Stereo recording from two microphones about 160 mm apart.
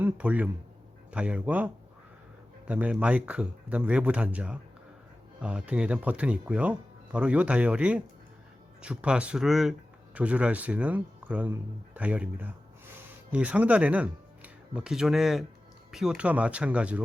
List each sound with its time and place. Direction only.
0.0 s speech: 10° right (ahead or behind)